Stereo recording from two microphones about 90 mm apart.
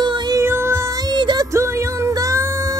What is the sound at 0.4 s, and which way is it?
Music, 30° right (ahead or behind).